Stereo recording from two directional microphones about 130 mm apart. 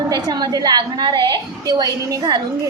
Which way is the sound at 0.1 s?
30° right (ahead or behind).